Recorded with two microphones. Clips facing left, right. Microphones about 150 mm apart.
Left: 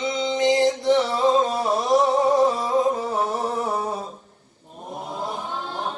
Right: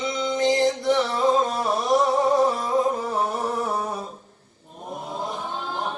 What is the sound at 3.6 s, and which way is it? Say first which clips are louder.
Mantra: left 1 dB; 25° left (ahead or behind).